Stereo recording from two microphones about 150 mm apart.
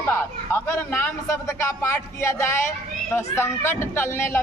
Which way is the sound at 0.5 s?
15° left (ahead or behind).